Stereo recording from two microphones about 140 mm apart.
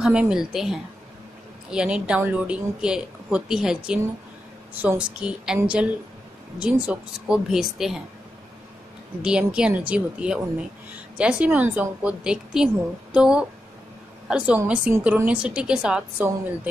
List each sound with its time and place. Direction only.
0.0 s a woman's voice: 5° right (ahead or behind)
9.2 s a woman's voice: 5° right (ahead or behind)